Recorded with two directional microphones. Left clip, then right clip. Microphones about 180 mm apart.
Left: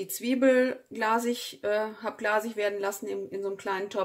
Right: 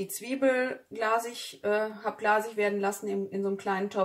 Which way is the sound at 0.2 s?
50° left (ahead or behind).